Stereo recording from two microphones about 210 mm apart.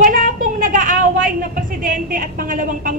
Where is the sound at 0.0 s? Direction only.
40° right (ahead or behind).